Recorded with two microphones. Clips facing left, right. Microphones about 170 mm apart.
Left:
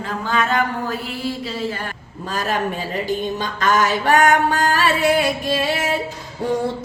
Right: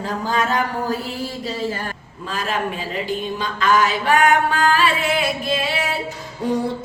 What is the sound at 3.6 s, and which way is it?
Music, 45° left (ahead or behind).